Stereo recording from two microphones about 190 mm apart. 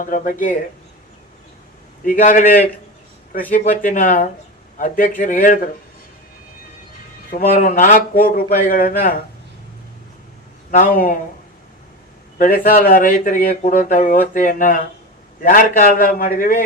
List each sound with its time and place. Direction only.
0.0 s speech: 45° left (ahead or behind)
2.0 s speech: 45° left (ahead or behind)
3.5 s speech: 40° left (ahead or behind)
7.3 s speech: 45° left (ahead or behind)
10.7 s speech: 45° left (ahead or behind)
12.4 s speech: 50° left (ahead or behind)